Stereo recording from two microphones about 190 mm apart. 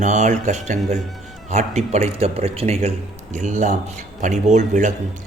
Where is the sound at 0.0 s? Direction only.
40° right (ahead or behind).